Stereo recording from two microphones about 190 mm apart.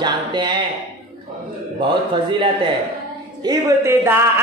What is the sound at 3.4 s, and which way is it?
Speech, 15° right (ahead or behind).